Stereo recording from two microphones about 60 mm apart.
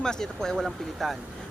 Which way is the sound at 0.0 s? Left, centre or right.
Centre.